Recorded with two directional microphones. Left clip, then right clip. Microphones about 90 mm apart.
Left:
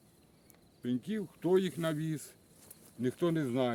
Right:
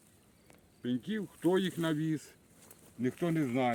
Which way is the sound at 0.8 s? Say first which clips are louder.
Even; 15° left (ahead or behind).